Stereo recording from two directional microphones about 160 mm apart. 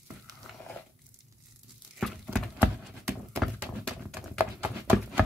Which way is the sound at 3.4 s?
Centre (ahead or behind).